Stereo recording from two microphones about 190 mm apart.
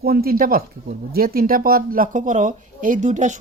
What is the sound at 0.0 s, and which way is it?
Speech, 55° right (ahead or behind).